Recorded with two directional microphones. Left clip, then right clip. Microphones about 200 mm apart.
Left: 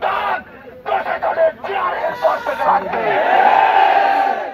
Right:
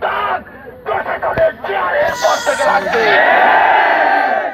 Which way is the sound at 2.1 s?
35° left (ahead or behind).